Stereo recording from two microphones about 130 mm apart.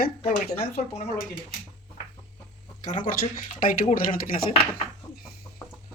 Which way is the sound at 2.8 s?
80° left.